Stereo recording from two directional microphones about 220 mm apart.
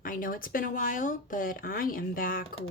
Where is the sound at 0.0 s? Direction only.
40° left (ahead or behind).